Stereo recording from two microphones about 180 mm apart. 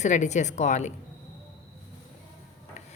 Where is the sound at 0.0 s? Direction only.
40° left (ahead or behind).